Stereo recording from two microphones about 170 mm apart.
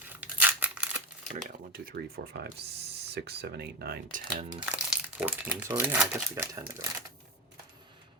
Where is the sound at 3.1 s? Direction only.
75° right (ahead or behind); by 4.2 s 60° right (ahead or behind).